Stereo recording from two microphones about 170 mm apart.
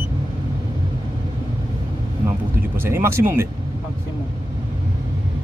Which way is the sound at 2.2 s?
15° right (ahead or behind).